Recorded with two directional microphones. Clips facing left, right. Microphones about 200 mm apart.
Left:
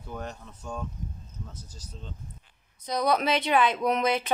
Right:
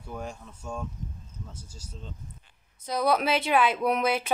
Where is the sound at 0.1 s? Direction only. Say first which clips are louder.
Even; 10° right (ahead or behind).